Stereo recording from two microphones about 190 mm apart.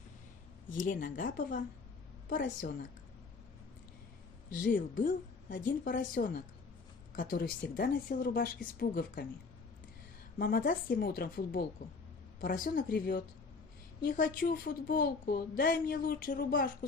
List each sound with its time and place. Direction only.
0.7 s a woman's voice: 45° left (ahead or behind)
4.6 s a woman's voice: 45° left (ahead or behind)
10.3 s a woman's voice: 50° left (ahead or behind)